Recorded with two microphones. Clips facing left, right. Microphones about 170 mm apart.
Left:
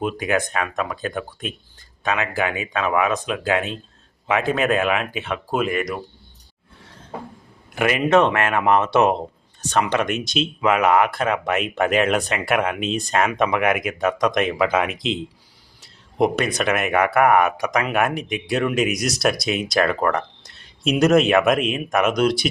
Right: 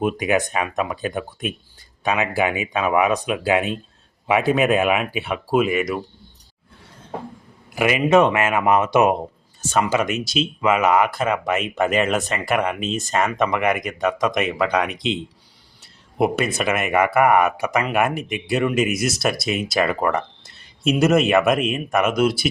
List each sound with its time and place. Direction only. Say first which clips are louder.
0.0 s speech: right 2 dB; 15° right (ahead or behind)
7.8 s speech: right 1 dB; 10° right (ahead or behind)
15.8 s a sound: left 1 dB; 5° right (ahead or behind)
16.6 s speech: even; 5° right (ahead or behind)